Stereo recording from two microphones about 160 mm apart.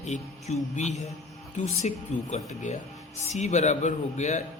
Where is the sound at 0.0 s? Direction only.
45° left (ahead or behind).